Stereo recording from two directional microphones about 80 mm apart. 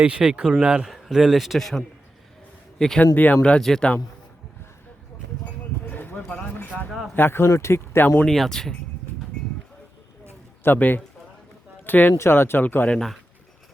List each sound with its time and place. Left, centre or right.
0.0 s speech: centre
0.9 s a man's voice: centre
3.2 s speech: left
5.9 s clip-clop: left
6.7 s a sound: centre
7.2 s speech: left
8.3 s a man's voice: centre
10.6 s speech: left
12.1 s speech: left